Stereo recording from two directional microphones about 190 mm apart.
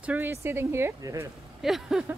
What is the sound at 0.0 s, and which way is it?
Speech, 10° right (ahead or behind).